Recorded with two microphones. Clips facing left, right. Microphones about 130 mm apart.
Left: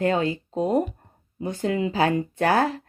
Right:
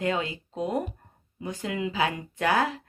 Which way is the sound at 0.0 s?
35° left (ahead or behind).